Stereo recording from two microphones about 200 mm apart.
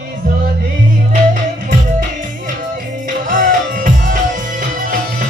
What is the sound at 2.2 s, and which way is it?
Music, 45° right (ahead or behind).